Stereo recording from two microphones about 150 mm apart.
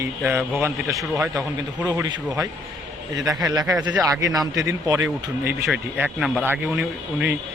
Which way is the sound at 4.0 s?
20° right (ahead or behind).